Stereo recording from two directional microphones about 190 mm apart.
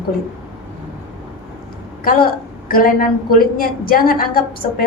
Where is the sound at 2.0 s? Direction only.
50° left (ahead or behind).